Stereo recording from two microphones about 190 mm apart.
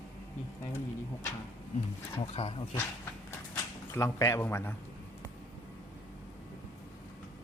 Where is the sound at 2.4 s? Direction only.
30° left (ahead or behind).